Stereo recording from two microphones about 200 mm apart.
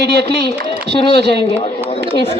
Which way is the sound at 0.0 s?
55° right (ahead or behind).